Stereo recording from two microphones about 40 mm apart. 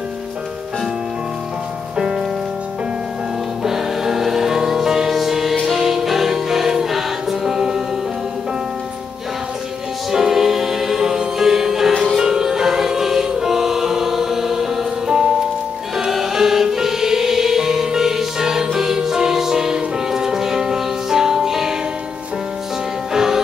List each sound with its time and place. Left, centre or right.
2.0 s music: centre
3.6 s music: centre
10.1 s music: centre
23.1 s music: centre